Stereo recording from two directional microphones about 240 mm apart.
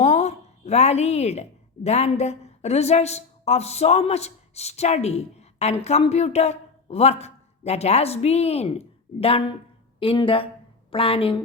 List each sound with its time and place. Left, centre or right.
0.0 s a woman's voice: left